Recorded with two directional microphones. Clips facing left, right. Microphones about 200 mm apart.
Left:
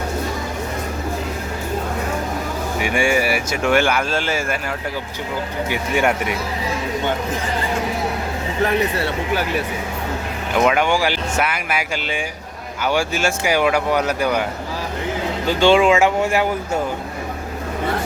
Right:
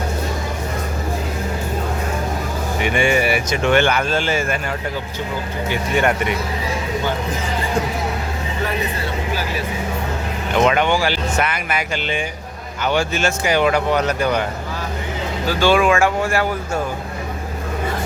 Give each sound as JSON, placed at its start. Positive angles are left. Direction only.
{"t": 2.8, "sound": "speech", "side_deg": 10}
{"t": 5.6, "sound": "speech", "side_deg": 10}
{"t": 10.5, "sound": "speech", "side_deg": 5}
{"t": 15.4, "sound": "speech", "side_deg": 25}